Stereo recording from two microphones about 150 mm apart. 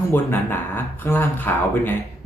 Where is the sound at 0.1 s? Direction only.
15° left (ahead or behind).